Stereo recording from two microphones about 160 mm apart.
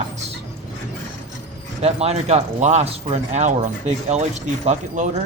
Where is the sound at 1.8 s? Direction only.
40° right (ahead or behind).